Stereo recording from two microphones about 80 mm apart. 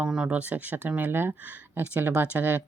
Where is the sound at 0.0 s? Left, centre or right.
Centre.